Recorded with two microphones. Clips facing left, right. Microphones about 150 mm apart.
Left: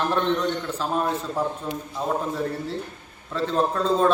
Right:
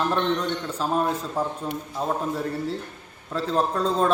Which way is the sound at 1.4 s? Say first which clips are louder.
Left 1 dB; 30° right (ahead or behind).